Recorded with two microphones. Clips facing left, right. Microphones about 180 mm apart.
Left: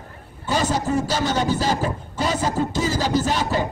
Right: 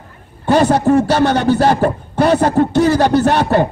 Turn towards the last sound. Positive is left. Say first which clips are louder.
# right 9 dB
turn(degrees=-60)  # may be behind; listen again after turning